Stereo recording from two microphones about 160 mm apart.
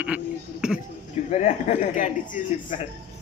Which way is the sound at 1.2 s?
45° left (ahead or behind).